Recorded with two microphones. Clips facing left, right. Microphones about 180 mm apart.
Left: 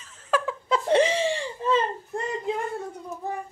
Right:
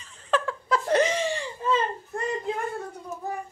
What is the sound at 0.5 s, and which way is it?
Giggle, 25° left (ahead or behind).